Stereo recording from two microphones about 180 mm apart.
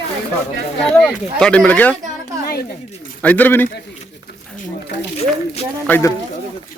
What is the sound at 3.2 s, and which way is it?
Speech, 10° left (ahead or behind).